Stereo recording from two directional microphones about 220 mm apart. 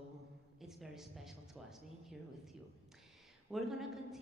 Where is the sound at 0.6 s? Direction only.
Centre (ahead or behind).